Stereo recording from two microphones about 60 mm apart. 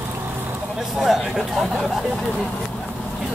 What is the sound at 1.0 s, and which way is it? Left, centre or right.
Speech, centre.